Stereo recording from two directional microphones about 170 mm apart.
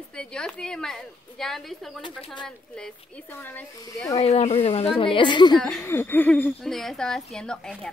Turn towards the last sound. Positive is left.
turn(degrees=5)  # may be behind; listen again after turning